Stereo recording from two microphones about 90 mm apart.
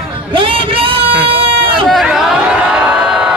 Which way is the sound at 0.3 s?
80° right.